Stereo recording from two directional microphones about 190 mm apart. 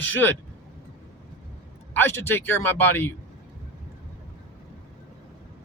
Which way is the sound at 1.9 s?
10° left (ahead or behind).